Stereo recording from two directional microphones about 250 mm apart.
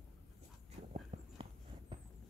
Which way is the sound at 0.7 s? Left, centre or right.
Right.